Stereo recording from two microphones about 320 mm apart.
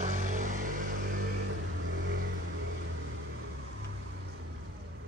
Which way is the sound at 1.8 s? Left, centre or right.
Right.